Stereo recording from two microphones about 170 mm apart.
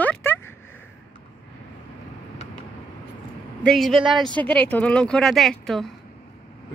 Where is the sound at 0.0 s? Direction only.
10° left (ahead or behind).